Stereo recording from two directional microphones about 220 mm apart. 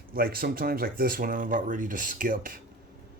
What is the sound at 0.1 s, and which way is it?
Speech, 40° right (ahead or behind).